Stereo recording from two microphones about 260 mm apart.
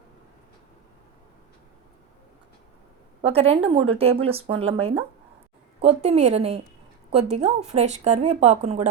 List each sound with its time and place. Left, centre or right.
3.2 s speech: right